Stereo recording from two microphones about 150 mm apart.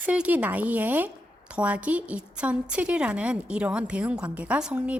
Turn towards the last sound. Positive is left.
turn(degrees=-10)  # may be behind; listen again after turning